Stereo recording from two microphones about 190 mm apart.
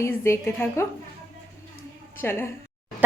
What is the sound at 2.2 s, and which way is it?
Speech, 10° left (ahead or behind).